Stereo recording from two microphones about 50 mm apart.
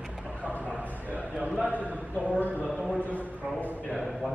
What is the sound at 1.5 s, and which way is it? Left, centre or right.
Speech, right.